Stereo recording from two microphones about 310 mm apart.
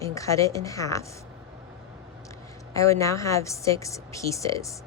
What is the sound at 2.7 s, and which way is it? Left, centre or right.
A woman's voice, centre.